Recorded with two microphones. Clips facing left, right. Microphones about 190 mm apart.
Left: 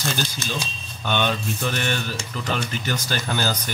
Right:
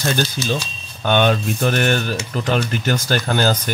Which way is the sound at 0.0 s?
55° right (ahead or behind).